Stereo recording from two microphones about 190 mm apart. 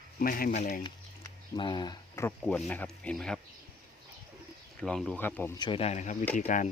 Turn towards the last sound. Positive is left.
turn(degrees=40)  # may be behind; listen again after turning